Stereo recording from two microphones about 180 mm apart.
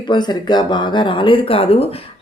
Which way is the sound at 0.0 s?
25° left (ahead or behind).